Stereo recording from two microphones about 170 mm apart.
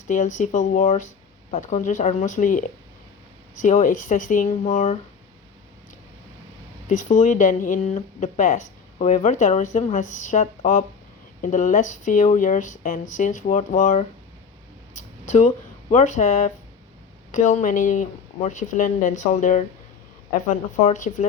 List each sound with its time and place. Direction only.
0.1 s speech: 45° left (ahead or behind)
6.8 s speech: 45° left (ahead or behind)
15.3 s speech: 45° left (ahead or behind)